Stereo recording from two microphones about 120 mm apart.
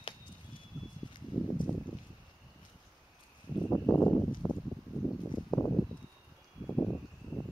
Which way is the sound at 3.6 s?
15° left (ahead or behind).